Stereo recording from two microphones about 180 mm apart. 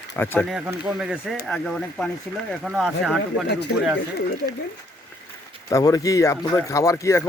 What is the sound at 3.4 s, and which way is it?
Speech, 70° left (ahead or behind).